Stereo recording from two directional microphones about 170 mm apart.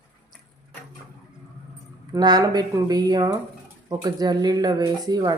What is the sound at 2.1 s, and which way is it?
Speech, 25° right (ahead or behind).